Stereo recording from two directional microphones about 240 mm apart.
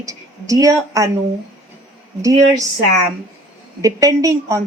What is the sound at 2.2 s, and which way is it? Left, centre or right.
Speech, centre.